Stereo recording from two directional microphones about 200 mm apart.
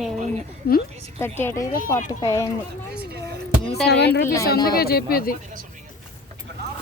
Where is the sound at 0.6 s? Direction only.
50° left (ahead or behind).